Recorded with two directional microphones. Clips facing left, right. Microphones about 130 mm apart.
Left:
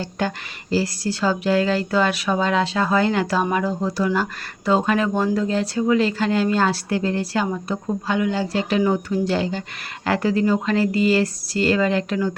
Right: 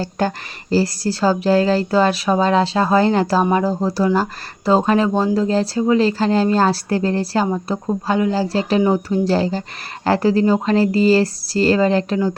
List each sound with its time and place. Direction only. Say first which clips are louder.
0.0 s speech: right 4 dB; 40° right (ahead or behind)